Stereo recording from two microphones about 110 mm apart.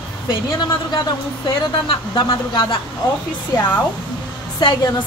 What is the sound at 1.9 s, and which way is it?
Speech, 50° left (ahead or behind).